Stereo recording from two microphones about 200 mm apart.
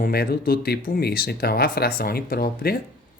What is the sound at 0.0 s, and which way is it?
Speech, 50° left (ahead or behind).